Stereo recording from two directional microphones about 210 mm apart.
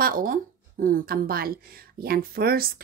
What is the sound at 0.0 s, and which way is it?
A woman's voice, 40° right (ahead or behind).